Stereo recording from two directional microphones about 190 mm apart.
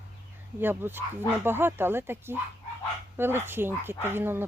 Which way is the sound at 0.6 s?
10° right (ahead or behind).